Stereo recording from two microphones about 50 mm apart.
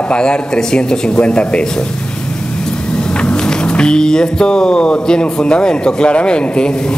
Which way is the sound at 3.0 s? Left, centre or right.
Centre.